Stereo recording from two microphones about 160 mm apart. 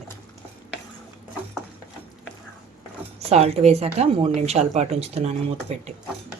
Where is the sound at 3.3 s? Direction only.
40° right (ahead or behind).